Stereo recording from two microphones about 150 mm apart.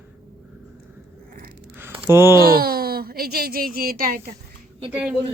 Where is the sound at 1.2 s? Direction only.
80° right.